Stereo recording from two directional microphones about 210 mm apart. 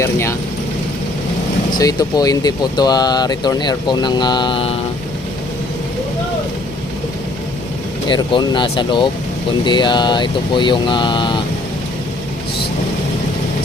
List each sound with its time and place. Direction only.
0.0 s speech: 15° left (ahead or behind)
1.8 s speech: 20° left (ahead or behind)
8.0 s speech: 20° left (ahead or behind)